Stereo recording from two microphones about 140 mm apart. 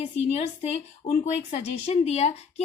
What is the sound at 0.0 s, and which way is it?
A woman's voice, 50° left (ahead or behind).